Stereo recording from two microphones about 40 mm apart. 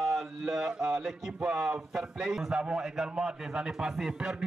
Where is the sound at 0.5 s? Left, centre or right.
Right.